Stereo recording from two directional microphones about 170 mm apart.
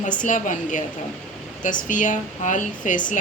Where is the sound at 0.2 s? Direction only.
50° left (ahead or behind).